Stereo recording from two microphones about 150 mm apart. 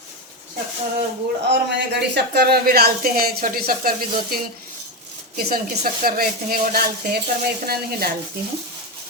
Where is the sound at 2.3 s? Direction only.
90° right.